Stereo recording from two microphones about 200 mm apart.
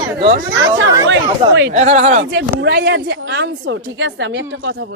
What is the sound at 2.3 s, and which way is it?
Speech, 55° right (ahead or behind).